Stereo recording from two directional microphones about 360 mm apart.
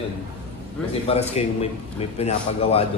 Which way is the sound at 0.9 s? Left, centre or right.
Centre.